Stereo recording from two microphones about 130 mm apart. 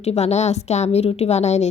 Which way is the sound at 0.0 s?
55° left (ahead or behind).